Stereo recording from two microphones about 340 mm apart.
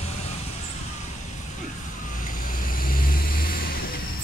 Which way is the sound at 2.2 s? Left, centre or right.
Left.